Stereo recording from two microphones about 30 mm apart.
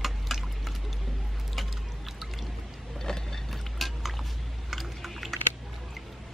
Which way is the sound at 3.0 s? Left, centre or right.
Centre.